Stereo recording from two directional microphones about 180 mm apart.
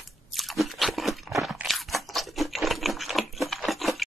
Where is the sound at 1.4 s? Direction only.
Centre (ahead or behind).